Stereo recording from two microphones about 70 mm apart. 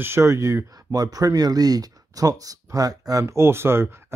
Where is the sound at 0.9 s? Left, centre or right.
Right.